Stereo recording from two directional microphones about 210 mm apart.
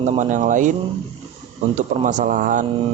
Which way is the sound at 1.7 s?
35° right (ahead or behind).